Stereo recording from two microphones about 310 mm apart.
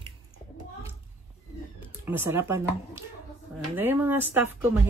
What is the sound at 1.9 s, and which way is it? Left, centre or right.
Speech, centre.